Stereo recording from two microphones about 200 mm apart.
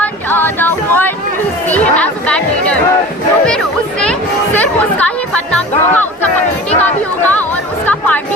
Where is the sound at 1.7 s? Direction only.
5° left (ahead or behind).